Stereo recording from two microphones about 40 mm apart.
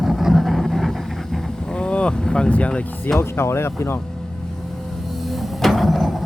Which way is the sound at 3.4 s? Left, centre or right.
Left.